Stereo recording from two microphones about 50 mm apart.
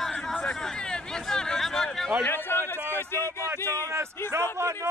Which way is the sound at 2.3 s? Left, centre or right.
Left.